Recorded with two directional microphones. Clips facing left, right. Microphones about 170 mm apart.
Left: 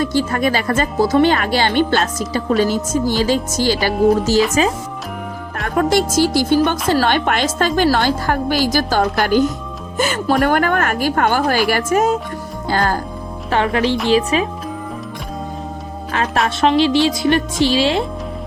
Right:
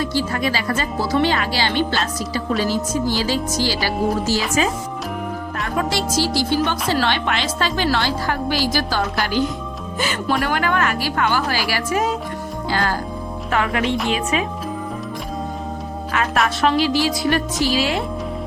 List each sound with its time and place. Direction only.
0.0 s speech: 50° left (ahead or behind)
4.6 s speech: 35° left (ahead or behind)
5.6 s speech: 50° left (ahead or behind)
13.5 s speech: 30° left (ahead or behind)
16.1 s speech: 25° left (ahead or behind)